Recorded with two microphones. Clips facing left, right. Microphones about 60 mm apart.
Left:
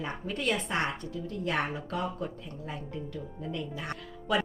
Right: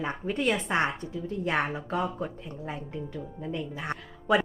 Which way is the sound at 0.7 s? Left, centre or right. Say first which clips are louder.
Right 4 dB; right.